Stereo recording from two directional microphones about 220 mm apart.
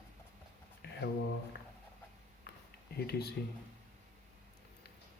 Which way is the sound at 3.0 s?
45° left (ahead or behind).